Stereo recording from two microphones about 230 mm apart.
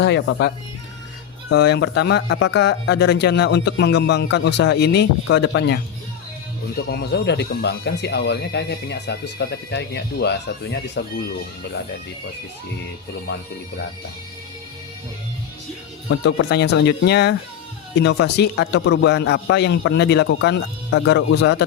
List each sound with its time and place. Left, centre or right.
0.0 s speech: left
6.9 s speech: left
16.0 s speech: left